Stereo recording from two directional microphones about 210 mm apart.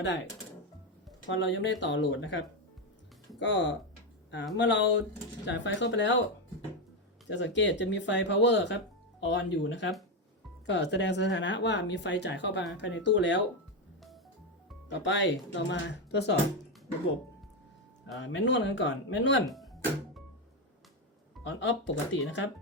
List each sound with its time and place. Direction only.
1.3 s speech: 60° left (ahead or behind)
3.4 s speech: 60° left (ahead or behind)
7.3 s speech: 60° left (ahead or behind)
14.8 s speech: 60° left (ahead or behind)
18.0 s speech: 60° left (ahead or behind)
19.5 s music: centre (ahead or behind)
21.4 s speech: 60° left (ahead or behind)